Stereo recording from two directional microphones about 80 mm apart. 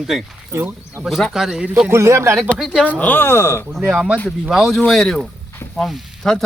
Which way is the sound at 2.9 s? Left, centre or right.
Left.